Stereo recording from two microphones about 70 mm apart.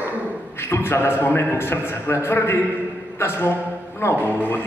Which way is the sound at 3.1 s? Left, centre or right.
Left.